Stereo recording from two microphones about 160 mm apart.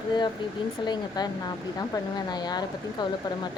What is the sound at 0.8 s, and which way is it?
Speech, 25° left (ahead or behind).